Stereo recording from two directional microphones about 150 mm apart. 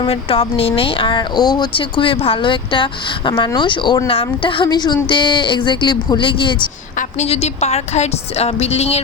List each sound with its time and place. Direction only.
0.0 s speech: 40° left (ahead or behind)
6.9 s a woman's voice: 50° left (ahead or behind)